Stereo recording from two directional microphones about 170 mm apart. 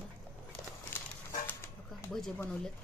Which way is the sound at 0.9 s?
15° left (ahead or behind).